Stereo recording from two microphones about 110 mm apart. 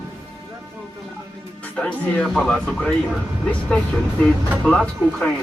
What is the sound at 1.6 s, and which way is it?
Speech, 15° left (ahead or behind).